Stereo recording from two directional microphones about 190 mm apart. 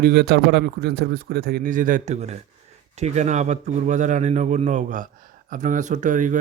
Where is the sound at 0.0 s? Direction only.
60° right (ahead or behind).